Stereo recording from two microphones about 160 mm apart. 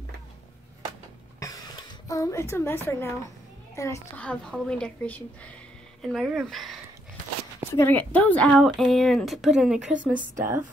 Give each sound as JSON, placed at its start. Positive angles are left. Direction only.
{"t": 1.4, "sound": "a sound", "side_deg": 20}
{"t": 2.9, "sound": "a woman's voice", "side_deg": 15}
{"t": 4.2, "sound": "a woman's voice", "side_deg": 5}
{"t": 7.7, "sound": "speech", "side_deg": 10}